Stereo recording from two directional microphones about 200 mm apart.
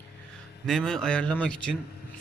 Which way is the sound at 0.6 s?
5° left (ahead or behind).